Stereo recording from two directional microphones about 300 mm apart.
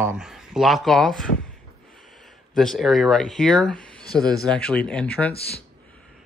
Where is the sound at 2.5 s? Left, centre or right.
Centre.